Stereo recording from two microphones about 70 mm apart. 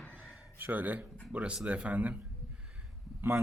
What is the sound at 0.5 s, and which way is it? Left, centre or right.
Speech, right.